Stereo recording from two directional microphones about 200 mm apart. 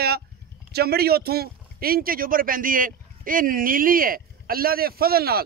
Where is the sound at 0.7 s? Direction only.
50° right (ahead or behind).